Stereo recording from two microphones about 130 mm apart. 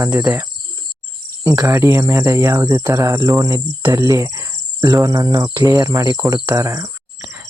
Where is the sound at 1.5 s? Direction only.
20° right (ahead or behind).